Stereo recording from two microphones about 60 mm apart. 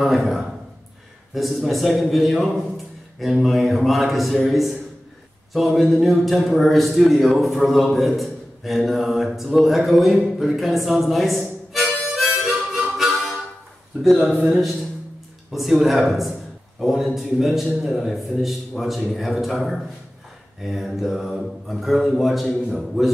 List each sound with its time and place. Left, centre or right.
0.0 s a man's voice: centre
14.1 s speech: right
15.5 s speech: centre